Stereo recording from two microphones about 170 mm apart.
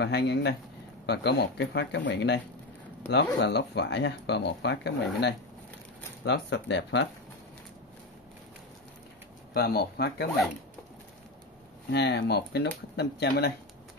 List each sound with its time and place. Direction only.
0.0 s speech: 80° left
3.3 s speech: 80° left
9.5 s speech: 70° left (ahead or behind)
11.9 s speech: 85° left; by 13.5 s 70° left (ahead or behind)